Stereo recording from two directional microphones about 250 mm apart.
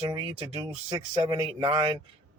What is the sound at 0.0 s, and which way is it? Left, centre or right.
Speech, right.